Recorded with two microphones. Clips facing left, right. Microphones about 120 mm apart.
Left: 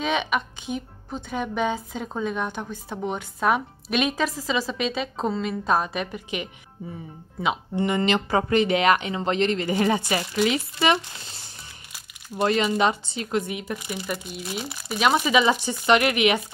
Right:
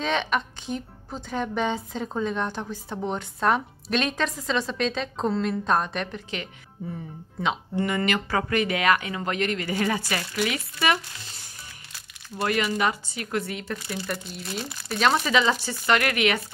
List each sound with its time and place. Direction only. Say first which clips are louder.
0.0 s a woman's voice: left 1 dB; 5° left (ahead or behind)
7.7 s speech: left 4 dB; 20° left (ahead or behind)